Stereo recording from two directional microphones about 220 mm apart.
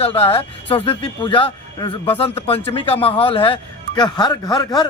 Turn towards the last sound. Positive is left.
turn(degrees=20)  # may be behind; listen again after turning